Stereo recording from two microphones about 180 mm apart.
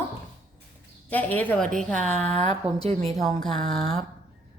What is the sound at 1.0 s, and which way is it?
A woman's voice, 10° left (ahead or behind).